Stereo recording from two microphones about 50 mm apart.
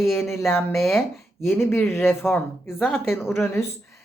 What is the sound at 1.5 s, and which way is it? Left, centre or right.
Speech, left.